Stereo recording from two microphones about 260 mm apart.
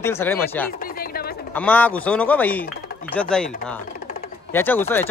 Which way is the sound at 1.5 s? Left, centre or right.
Centre.